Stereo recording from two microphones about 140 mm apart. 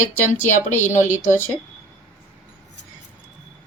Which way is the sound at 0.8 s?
60° left (ahead or behind).